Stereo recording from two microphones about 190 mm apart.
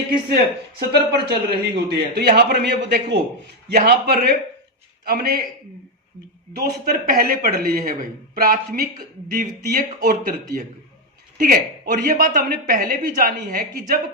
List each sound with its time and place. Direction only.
0.8 s a man's voice: 60° right (ahead or behind)
6.6 s a man's voice: 50° right (ahead or behind)